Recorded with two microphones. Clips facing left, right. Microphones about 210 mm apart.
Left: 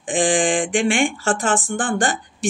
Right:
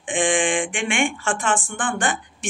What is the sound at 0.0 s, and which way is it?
Speech, 35° left (ahead or behind).